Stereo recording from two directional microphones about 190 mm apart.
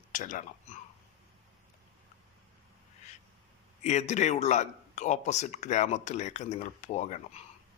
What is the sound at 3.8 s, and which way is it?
Speech, 35° left (ahead or behind).